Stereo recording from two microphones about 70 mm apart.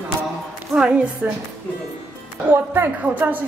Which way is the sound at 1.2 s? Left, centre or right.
Right.